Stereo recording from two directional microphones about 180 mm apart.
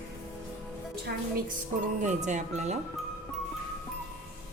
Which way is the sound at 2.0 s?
40° right (ahead or behind).